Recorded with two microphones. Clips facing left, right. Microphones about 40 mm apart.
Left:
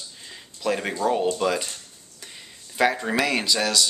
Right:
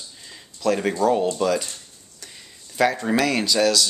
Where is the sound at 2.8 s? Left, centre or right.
Centre.